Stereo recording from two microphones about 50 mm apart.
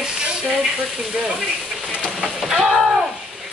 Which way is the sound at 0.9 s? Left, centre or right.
Centre.